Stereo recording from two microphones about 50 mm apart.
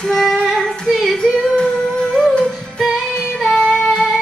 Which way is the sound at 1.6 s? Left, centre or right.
Centre.